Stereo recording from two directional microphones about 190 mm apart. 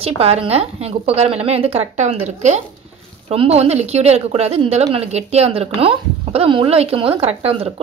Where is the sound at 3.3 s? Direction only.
30° right (ahead or behind).